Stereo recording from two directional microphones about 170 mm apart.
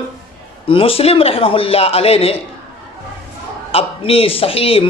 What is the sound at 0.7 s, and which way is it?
Speech, 30° left (ahead or behind).